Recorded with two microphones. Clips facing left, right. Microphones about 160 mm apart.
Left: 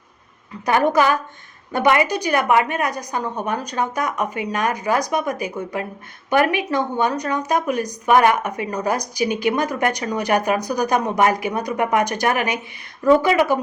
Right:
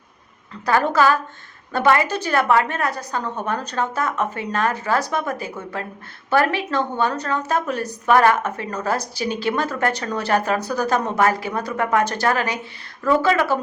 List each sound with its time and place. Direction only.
0.6 s a woman's voice: 15° left (ahead or behind)